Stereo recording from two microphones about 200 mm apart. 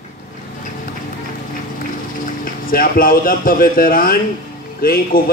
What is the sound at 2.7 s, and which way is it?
A man's voice, 45° left (ahead or behind).